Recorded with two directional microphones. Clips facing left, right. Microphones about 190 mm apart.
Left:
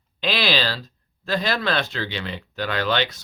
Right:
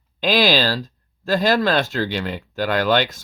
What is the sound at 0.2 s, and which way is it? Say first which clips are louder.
Speech: right 6 dB; 45° right (ahead or behind).